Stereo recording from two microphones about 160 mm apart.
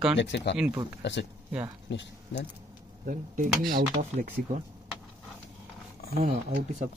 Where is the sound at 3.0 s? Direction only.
60° right (ahead or behind).